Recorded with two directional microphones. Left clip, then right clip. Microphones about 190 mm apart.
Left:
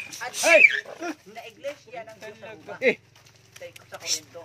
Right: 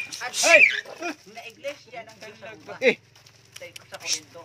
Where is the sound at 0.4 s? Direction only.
10° right (ahead or behind).